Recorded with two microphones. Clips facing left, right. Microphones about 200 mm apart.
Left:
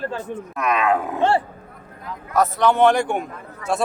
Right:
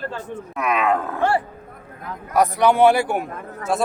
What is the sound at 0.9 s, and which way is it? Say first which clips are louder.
Speech: left 1 dB; 15° left (ahead or behind).